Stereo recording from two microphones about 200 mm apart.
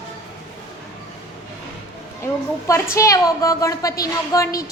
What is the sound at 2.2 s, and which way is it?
A woman's voice, 15° left (ahead or behind).